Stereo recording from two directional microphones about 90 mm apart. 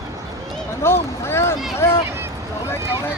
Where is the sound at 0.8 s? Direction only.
30° left (ahead or behind).